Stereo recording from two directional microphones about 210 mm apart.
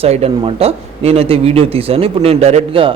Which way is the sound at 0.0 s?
30° right (ahead or behind).